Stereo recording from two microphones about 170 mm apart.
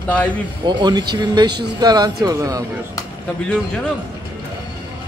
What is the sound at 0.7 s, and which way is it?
Speech, 25° right (ahead or behind).